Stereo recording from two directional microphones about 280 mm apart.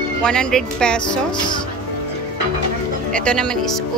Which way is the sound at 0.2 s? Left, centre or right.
Centre.